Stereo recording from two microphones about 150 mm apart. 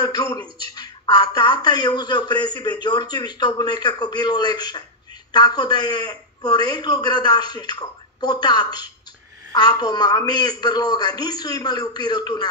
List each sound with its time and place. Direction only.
0.0 s speech: 25° left (ahead or behind)